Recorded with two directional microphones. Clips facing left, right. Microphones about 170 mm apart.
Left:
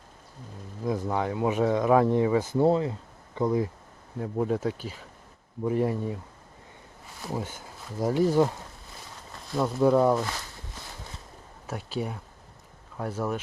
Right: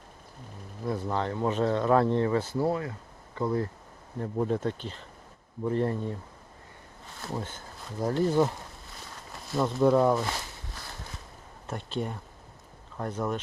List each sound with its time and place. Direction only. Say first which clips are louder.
0.9 s speech: left 2 dB; 15° left (ahead or behind)
7.2 s speech: left 2 dB; 10° left (ahead or behind)
9.6 s speech: left 1 dB; 5° left (ahead or behind)
11.6 s a sound: left 1 dB; 5° left (ahead or behind)
13.0 s speech: left 1 dB; 5° left (ahead or behind)